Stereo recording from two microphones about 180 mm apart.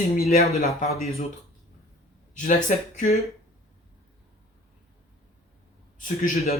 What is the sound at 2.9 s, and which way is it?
Speech, 40° left (ahead or behind).